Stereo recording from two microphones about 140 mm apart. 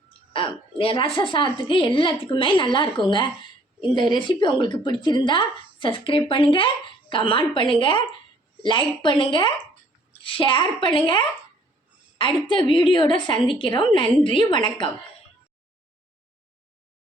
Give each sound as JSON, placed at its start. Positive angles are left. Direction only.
{"t": 0.3, "sound": "a woman's voice", "side_deg": 40}